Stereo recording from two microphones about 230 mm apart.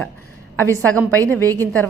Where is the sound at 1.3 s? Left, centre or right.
Centre.